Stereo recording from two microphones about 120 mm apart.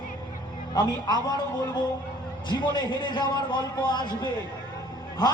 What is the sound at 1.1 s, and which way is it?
Speech, 35° left (ahead or behind).